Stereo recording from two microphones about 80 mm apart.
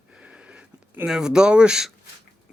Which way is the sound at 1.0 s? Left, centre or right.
Centre.